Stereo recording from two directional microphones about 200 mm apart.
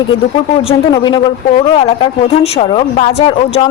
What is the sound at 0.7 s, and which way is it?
A woman's voice, 25° left (ahead or behind).